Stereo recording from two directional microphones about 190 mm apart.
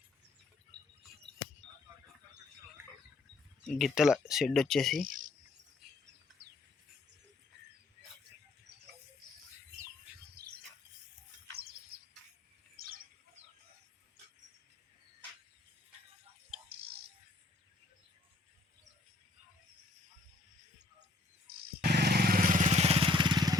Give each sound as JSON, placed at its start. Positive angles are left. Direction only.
{"t": 3.6, "sound": "speech", "side_deg": 5}
{"t": 5.0, "sound": "cricket", "side_deg": -45}
{"t": 21.4, "sound": "vehicle", "side_deg": -55}